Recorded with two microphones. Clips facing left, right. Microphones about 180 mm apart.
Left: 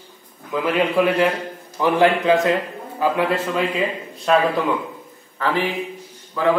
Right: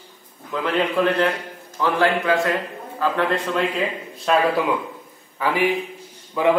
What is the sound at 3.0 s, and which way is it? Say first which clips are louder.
A man's voice: left 2 dB; 10° left (ahead or behind).